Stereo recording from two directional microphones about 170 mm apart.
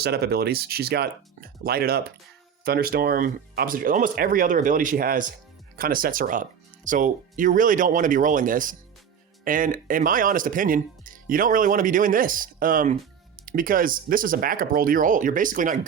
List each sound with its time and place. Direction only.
0.0 s speech: 70° right (ahead or behind); by 15.8 s 50° right (ahead or behind)